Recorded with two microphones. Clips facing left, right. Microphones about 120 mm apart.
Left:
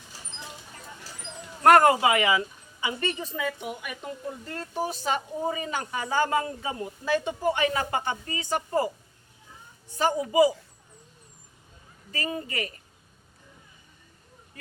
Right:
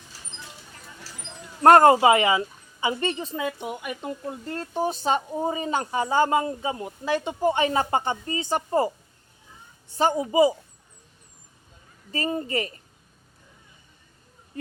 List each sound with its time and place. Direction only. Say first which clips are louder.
1.6 s a woman's voice: right 4 dB; 30° right (ahead or behind)
10.0 s a woman's voice: right 2 dB; 25° right (ahead or behind)
12.1 s a woman's voice: right 5 dB; 30° right (ahead or behind)